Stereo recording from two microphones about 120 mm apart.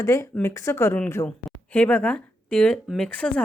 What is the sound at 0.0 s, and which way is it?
Speech, 25° left (ahead or behind).